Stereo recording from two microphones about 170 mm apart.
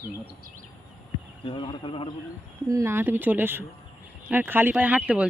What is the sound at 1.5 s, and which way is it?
Speech, 30° left (ahead or behind).